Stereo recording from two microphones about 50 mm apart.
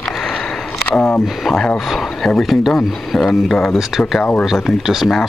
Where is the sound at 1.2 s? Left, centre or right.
Centre.